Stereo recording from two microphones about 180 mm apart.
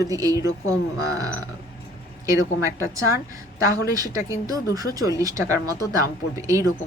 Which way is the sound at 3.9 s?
20° right (ahead or behind).